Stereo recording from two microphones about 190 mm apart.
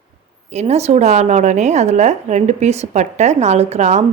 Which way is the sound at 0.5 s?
35° right (ahead or behind).